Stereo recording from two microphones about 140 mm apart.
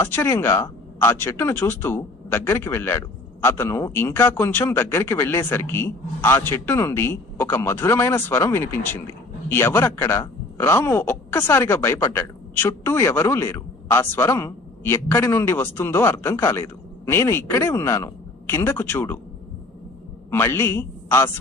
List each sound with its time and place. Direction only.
0.0 s speech: 15° left (ahead or behind)
20.3 s a man's voice: 15° left (ahead or behind)